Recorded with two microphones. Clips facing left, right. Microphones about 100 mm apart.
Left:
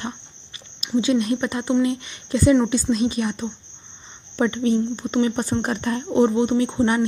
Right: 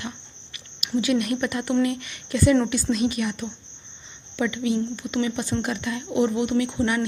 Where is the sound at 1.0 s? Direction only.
30° left (ahead or behind).